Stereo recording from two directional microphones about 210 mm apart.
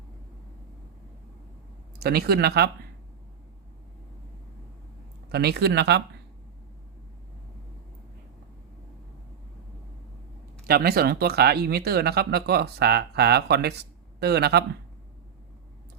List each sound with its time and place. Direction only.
2.0 s speech: 50° right (ahead or behind)
5.3 s speech: 50° right (ahead or behind)
10.7 s speech: 45° right (ahead or behind)